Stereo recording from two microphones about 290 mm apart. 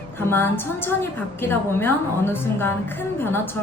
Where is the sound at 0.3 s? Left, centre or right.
Centre.